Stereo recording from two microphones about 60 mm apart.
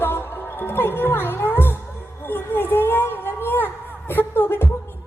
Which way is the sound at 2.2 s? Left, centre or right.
Left.